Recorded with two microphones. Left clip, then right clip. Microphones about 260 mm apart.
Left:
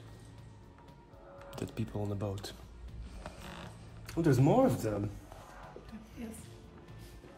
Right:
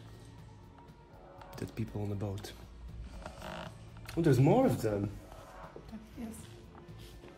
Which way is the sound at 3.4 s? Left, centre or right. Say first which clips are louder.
Right 7 dB; centre.